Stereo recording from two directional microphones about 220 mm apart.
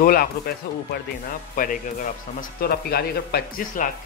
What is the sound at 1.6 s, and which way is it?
Speech, 40° left (ahead or behind).